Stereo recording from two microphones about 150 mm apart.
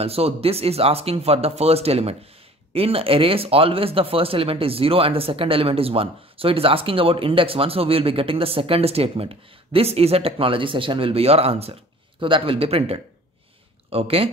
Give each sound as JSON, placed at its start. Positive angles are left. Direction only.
{"t": 0.0, "sound": "speech", "side_deg": -40}